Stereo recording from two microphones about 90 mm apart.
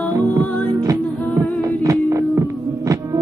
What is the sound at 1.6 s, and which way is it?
Music, 40° right (ahead or behind).